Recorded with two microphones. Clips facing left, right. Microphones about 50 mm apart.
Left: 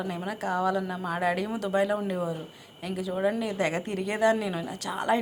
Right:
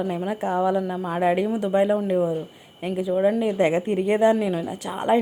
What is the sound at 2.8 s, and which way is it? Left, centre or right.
A woman's voice, right.